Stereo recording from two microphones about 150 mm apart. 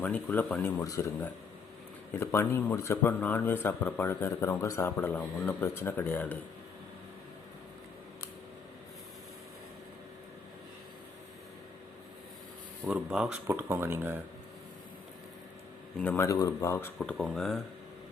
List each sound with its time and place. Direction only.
0.0 s speech: 10° left (ahead or behind)
0.8 s speech: 20° left (ahead or behind)
12.8 s speech: 5° right (ahead or behind)
13.5 s speech: 15° right (ahead or behind)
16.0 s speech: 15° left (ahead or behind)
17.0 s speech: centre (ahead or behind)